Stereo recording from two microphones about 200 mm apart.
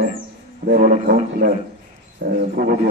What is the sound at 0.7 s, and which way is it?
A man's voice, 45° right (ahead or behind).